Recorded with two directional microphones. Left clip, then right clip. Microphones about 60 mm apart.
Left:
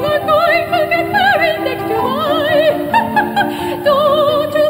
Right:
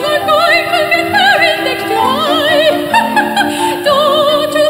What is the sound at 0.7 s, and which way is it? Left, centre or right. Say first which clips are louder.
Opera: right 3 dB; centre.